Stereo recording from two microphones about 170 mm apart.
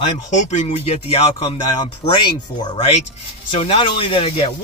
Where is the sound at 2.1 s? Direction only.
25° left (ahead or behind).